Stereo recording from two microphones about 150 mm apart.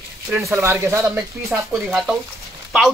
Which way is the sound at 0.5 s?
15° right (ahead or behind).